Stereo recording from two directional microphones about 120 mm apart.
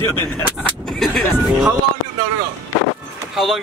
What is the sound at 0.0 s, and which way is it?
Speech, 15° left (ahead or behind).